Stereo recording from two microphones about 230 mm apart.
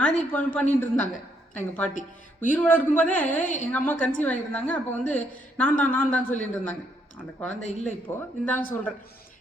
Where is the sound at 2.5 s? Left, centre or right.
Centre.